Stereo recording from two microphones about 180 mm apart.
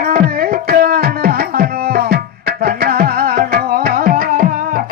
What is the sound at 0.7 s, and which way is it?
Music, 55° right (ahead or behind).